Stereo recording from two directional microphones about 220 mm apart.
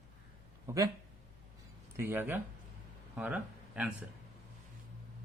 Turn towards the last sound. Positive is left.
turn(degrees=-5)  # may be behind; listen again after turning